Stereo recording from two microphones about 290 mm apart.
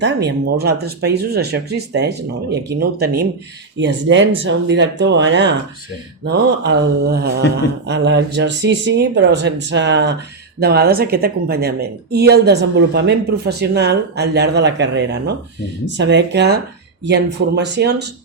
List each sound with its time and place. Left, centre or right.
0.0 s a woman's voice: right